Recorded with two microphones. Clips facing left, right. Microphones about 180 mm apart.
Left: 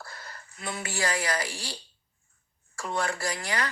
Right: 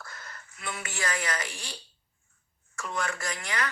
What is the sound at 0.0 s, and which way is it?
Speech, 35° left (ahead or behind).